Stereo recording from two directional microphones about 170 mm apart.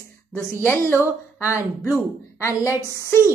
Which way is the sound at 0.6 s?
15° left (ahead or behind).